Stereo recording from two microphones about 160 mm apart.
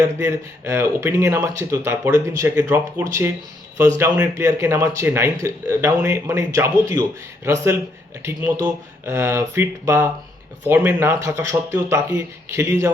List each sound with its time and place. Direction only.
0.2 s speech: 15° right (ahead or behind)